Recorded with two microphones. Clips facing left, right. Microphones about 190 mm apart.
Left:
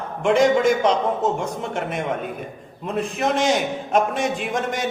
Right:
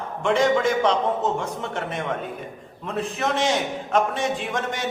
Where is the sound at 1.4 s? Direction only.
15° left (ahead or behind).